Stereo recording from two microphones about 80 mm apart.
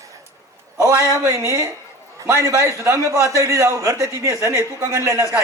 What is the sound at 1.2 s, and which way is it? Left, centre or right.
A man's voice, right.